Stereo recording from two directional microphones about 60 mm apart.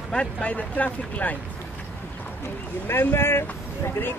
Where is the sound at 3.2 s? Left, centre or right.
Left.